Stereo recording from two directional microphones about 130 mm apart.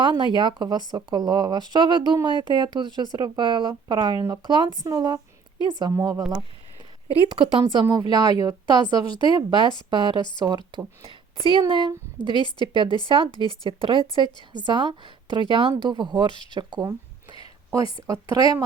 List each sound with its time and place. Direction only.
0.0 s speech: 40° right (ahead or behind)
5.9 s speech: 25° right (ahead or behind)
7.1 s speech: 40° right (ahead or behind)
10.2 s a woman's voice: 35° left (ahead or behind)
10.7 s speech: 40° right (ahead or behind)
12.4 s a woman's voice: 35° left (ahead or behind)
12.6 s speech: 40° right (ahead or behind)
13.3 s a woman's voice: 35° left (ahead or behind)
14.7 s speech: 35° right (ahead or behind)
17.4 s a sound: 25° right (ahead or behind)
18.0 s speech: 25° right (ahead or behind)